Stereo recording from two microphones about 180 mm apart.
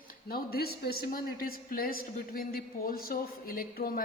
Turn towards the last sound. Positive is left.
turn(degrees=50)  # may be behind; listen again after turning